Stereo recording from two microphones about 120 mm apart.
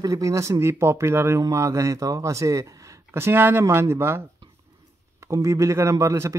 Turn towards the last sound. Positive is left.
turn(degrees=-25)  # may be behind; listen again after turning